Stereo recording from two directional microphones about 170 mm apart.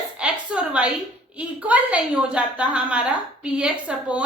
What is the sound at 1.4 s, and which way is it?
A woman's voice, 10° right (ahead or behind).